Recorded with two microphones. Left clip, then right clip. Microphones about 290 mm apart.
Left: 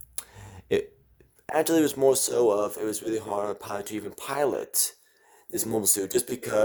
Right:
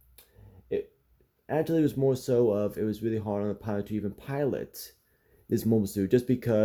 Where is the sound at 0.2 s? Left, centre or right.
Left.